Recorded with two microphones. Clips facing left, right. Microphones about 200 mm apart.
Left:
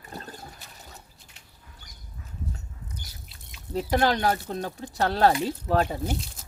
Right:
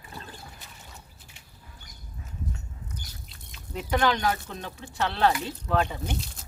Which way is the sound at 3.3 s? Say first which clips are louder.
Left 6 dB; 35° left (ahead or behind).